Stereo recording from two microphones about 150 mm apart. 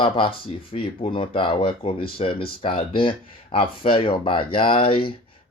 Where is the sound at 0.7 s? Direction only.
35° left (ahead or behind).